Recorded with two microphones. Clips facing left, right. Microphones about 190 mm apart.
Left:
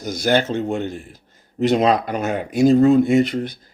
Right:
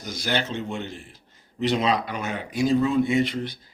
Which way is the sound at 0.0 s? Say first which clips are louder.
Left 9 dB; 45° left (ahead or behind).